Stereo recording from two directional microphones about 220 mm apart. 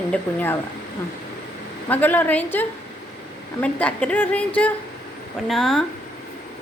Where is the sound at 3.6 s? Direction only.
5° left (ahead or behind).